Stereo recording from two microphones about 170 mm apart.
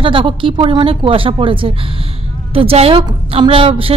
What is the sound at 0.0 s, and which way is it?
A woman's voice, 30° right (ahead or behind).